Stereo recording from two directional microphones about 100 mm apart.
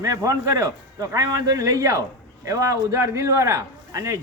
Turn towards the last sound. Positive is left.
turn(degrees=-30)  # may be behind; listen again after turning